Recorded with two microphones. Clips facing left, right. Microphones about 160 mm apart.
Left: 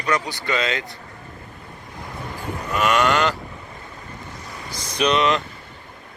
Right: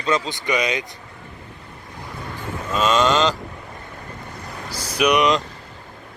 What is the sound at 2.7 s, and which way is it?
Speech, 20° right (ahead or behind).